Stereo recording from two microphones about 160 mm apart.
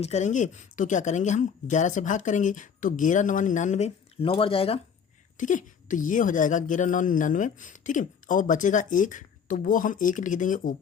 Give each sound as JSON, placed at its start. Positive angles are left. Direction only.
{"t": 0.0, "sound": "a woman's voice", "side_deg": 45}
{"t": 5.4, "sound": "a woman's voice", "side_deg": 55}